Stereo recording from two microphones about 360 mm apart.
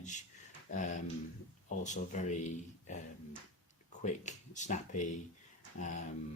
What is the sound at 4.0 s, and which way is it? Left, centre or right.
Speech, centre.